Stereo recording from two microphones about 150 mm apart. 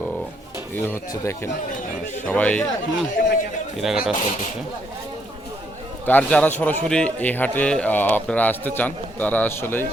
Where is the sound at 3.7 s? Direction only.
Centre (ahead or behind).